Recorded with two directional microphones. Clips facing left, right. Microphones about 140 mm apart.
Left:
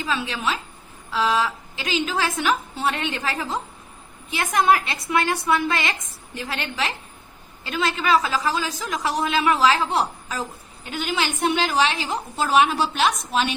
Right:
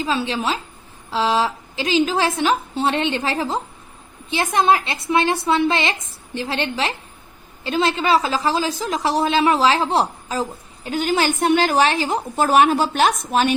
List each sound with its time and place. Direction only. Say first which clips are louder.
0.0 s a woman's voice: right 4 dB; 30° right (ahead or behind); by 13.5 s 45° right (ahead or behind)